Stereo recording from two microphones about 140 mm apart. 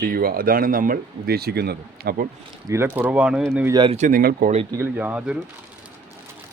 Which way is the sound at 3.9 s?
75° right (ahead or behind).